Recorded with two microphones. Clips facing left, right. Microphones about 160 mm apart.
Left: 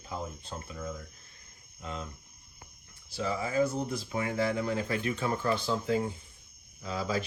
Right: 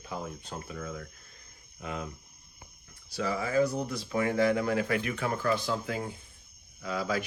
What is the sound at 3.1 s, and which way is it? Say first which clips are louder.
Speech: right 2 dB; 25° left (ahead or behind).